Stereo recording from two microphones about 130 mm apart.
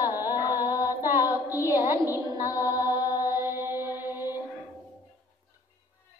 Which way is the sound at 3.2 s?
20° right (ahead or behind).